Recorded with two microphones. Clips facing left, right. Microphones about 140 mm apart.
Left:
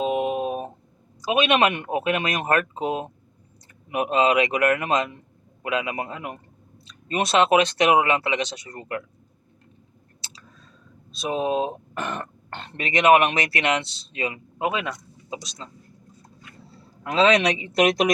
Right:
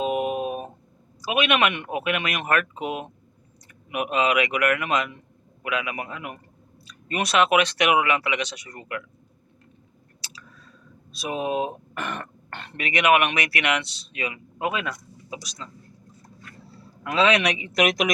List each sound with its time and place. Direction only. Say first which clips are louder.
0.0 s a sound: left 1 dB; 25° left (ahead or behind)
1.2 s speech: left 3 dB; 25° left (ahead or behind)
11.2 s speech: left 2 dB; 30° left (ahead or behind)
17.0 s speech: left 2 dB; 30° left (ahead or behind)